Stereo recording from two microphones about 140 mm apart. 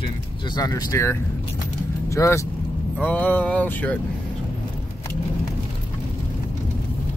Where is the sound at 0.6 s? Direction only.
25° left (ahead or behind).